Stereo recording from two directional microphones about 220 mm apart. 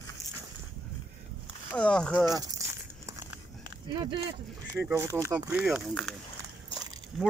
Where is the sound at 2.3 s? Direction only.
15° right (ahead or behind).